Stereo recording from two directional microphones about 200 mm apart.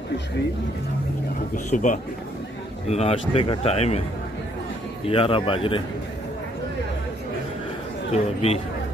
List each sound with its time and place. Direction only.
1.7 s speech: 40° left (ahead or behind)
5.1 s speech: 30° left (ahead or behind)
8.1 s speech: 30° left (ahead or behind)